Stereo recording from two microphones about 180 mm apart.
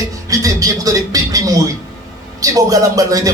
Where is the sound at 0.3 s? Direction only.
20° right (ahead or behind).